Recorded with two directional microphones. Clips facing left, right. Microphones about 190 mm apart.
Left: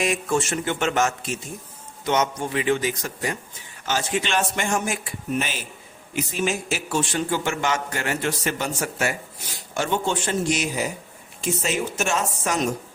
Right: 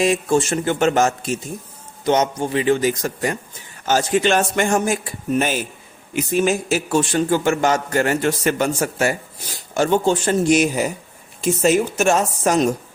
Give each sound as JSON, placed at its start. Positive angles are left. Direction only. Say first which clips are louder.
{"t": 0.0, "sound": "a man's voice", "louder": "right 6 dB", "side_deg": -30}
{"t": 9.7, "sound": "a man's voice", "louder": "right 7 dB", "side_deg": -40}